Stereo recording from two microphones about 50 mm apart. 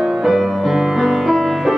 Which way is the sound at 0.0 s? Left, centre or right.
Centre.